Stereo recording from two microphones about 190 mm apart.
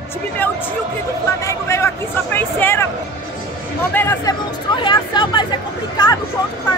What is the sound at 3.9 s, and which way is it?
Speech, 10° left (ahead or behind).